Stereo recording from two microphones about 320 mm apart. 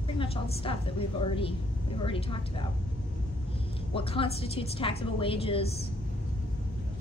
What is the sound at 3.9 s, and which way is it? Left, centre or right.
A woman's voice, centre.